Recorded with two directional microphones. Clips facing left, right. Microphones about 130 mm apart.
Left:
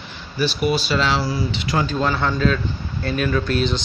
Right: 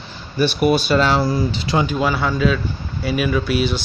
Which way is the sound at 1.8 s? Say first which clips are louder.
Right 1 dB; 10° right (ahead or behind).